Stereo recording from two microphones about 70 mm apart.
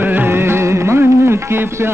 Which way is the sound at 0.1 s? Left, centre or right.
Right.